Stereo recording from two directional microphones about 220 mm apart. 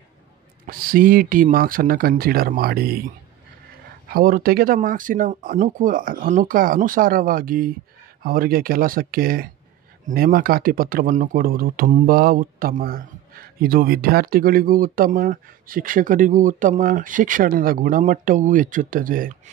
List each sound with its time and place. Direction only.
0.7 s speech: 40° right (ahead or behind)
4.1 s speech: 40° right (ahead or behind)